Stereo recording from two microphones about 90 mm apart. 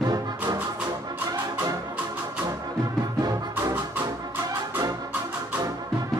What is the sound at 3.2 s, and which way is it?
Music, 45° right (ahead or behind).